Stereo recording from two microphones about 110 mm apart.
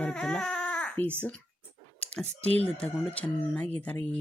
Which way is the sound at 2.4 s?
70° right (ahead or behind).